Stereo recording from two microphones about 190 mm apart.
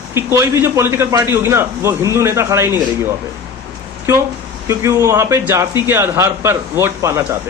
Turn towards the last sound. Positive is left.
turn(degrees=-15)  # may be behind; listen again after turning